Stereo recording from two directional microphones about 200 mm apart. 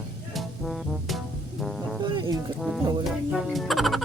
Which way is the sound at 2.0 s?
20° right (ahead or behind).